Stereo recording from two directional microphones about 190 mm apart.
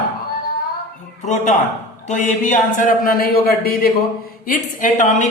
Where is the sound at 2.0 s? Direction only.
40° left (ahead or behind).